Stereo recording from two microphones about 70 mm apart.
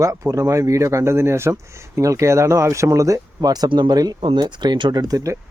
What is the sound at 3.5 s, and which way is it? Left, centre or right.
Speech, right.